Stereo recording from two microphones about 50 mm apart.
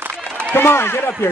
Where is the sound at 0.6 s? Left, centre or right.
Left.